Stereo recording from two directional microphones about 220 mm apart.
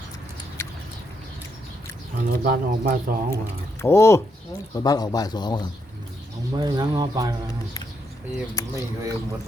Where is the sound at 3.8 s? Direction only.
10° left (ahead or behind).